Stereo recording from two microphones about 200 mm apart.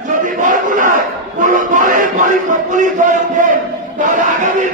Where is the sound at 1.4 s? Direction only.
40° right (ahead or behind).